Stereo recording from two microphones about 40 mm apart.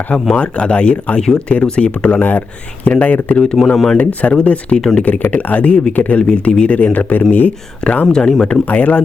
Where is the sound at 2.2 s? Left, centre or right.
Left.